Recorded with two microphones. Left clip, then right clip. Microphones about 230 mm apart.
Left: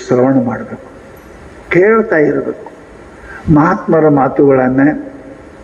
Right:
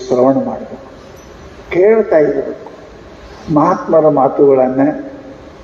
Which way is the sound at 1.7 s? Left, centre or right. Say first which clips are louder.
Even; left.